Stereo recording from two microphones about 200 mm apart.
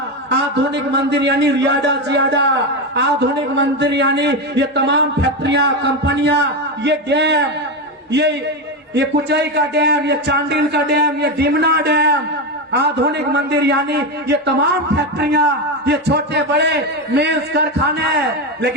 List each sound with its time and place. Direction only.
0.3 s a man's voice: 60° right (ahead or behind)